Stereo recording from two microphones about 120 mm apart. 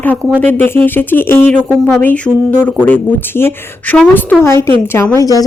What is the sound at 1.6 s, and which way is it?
Speech, 15° right (ahead or behind).